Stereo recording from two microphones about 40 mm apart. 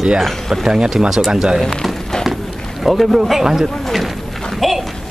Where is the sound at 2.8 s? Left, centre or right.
Centre.